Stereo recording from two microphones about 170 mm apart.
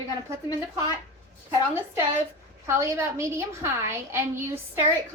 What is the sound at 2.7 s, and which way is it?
A woman's voice, 15° right (ahead or behind).